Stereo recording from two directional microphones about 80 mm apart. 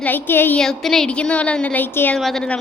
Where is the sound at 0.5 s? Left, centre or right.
Centre.